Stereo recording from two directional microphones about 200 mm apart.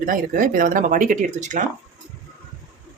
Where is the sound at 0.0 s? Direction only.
40° right (ahead or behind).